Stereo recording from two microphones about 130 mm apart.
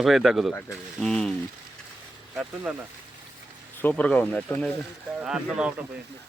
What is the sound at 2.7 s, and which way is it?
Speech, 10° right (ahead or behind).